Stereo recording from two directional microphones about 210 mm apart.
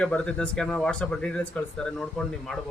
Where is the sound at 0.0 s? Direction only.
5° left (ahead or behind).